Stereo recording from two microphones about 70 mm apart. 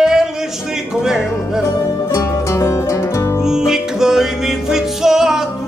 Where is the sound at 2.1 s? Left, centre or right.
Left.